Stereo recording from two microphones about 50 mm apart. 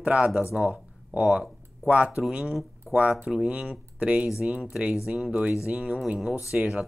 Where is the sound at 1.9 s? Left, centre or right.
Right.